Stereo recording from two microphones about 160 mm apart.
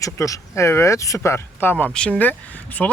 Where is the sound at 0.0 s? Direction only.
20° left (ahead or behind).